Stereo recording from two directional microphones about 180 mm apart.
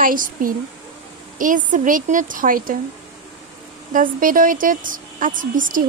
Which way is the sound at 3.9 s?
50° right (ahead or behind).